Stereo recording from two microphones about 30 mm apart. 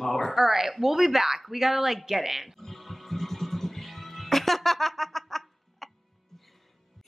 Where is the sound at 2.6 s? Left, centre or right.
Centre.